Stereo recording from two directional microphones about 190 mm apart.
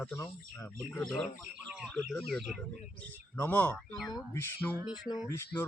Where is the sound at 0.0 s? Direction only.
10° left (ahead or behind).